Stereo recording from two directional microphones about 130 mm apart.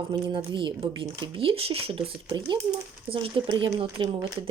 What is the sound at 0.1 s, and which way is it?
Speech, 40° right (ahead or behind).